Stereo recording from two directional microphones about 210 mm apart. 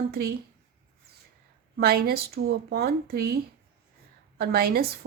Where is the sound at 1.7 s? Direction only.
45° right (ahead or behind).